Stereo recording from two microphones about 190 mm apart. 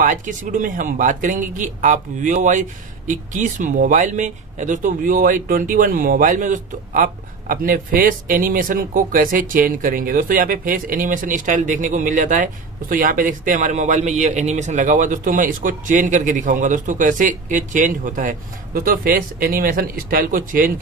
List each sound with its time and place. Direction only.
0.0 s speech: 45° right (ahead or behind)